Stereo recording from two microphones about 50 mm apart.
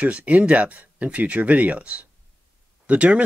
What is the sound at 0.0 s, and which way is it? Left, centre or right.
Speech, right.